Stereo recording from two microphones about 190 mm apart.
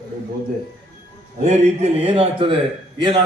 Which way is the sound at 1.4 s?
30° right (ahead or behind).